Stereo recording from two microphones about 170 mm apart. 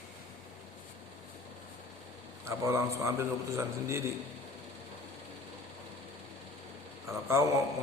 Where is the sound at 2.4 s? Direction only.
15° right (ahead or behind).